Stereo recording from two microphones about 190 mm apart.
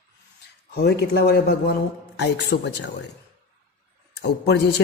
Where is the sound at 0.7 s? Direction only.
60° left (ahead or behind).